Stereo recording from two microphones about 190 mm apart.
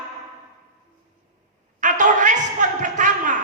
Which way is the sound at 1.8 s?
40° right (ahead or behind).